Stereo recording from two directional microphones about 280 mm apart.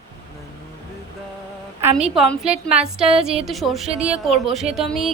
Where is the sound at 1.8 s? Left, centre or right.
Centre.